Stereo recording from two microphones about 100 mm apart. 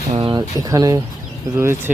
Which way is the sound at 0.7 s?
30° right (ahead or behind).